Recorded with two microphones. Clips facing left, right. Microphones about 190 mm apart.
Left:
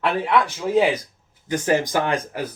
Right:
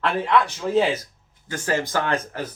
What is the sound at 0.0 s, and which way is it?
A man's voice, 10° left (ahead or behind).